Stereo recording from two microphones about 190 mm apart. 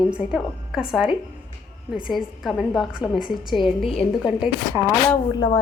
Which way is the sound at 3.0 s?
25° left (ahead or behind).